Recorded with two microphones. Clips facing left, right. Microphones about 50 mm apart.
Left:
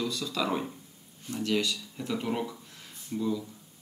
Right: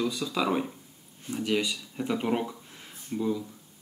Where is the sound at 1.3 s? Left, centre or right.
Centre.